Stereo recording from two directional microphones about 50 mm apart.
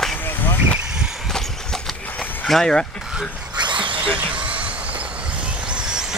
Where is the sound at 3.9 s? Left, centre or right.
Right.